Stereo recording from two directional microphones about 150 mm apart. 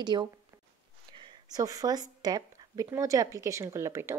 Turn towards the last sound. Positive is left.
turn(degrees=-20)  # may be behind; listen again after turning